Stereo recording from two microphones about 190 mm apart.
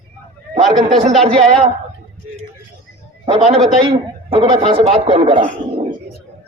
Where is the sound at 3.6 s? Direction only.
30° right (ahead or behind).